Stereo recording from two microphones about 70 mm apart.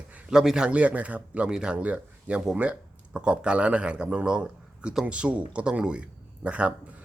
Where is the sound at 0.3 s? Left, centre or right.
Centre.